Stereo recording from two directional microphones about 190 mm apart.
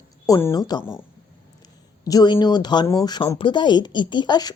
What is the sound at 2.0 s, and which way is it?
Speech, 20° left (ahead or behind).